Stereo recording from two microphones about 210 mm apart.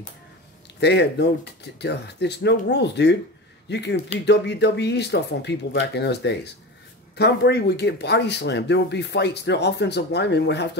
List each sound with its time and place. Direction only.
0.7 s speech: 55° left (ahead or behind)